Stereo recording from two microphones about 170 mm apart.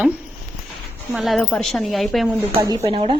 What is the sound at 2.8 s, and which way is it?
Speech, 35° right (ahead or behind).